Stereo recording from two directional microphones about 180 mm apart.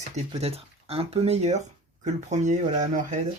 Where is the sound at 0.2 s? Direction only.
35° right (ahead or behind).